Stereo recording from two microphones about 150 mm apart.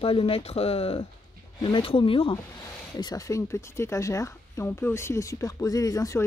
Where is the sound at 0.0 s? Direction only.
40° left (ahead or behind).